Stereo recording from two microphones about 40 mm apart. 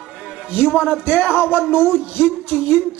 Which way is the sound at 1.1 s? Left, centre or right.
Left.